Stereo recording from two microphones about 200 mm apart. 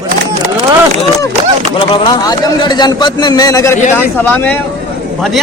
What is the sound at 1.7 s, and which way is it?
A man's voice, 25° left (ahead or behind).